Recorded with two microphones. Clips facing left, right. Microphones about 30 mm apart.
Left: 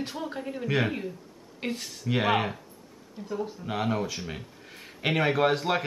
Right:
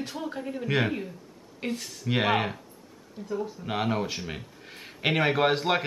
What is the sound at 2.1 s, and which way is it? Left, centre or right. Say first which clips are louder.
Speech: even; centre.